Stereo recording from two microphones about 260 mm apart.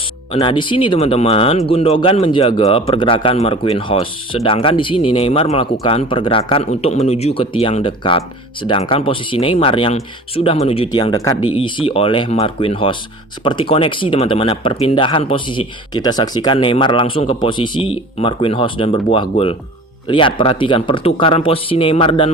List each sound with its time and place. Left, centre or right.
0.3 s speech: centre